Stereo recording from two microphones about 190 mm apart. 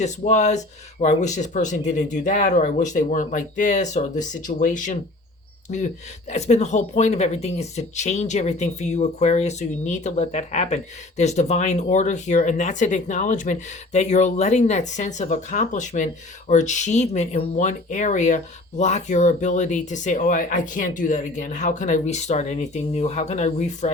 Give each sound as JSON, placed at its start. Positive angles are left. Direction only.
{"t": 0.3, "sound": "speech", "side_deg": 40}